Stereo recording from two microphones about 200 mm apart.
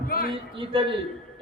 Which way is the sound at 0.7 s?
25° right (ahead or behind).